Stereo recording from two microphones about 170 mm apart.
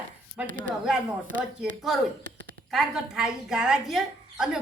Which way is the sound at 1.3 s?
50° right (ahead or behind).